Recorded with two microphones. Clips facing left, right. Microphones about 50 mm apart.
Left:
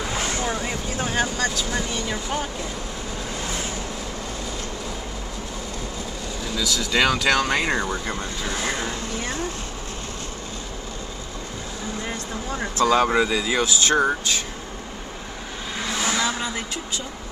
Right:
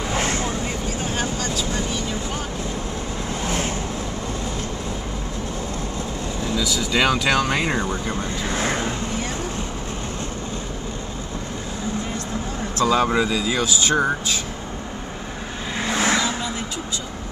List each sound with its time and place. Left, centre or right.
3.4 s vehicle: right
6.5 s speech: centre
8.5 s vehicle: right
12.8 s speech: centre
13.1 s speech: centre
13.7 s speech: centre
16.0 s vehicle: right